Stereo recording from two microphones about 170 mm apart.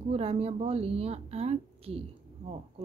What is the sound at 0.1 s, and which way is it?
Speech, 35° right (ahead or behind).